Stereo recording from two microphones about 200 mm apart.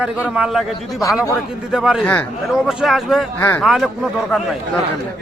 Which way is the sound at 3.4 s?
10° left (ahead or behind).